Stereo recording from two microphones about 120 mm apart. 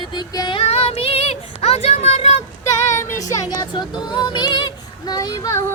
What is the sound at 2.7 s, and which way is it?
Music, 25° left (ahead or behind).